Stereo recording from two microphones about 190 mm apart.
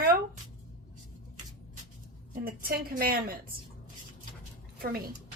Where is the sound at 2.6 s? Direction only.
50° right (ahead or behind).